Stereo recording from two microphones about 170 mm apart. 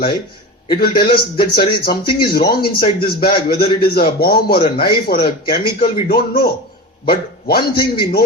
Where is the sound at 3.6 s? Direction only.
30° left (ahead or behind).